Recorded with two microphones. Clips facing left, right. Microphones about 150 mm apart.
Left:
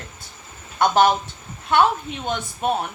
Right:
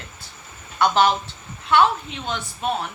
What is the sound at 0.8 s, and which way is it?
Speech, 45° left (ahead or behind).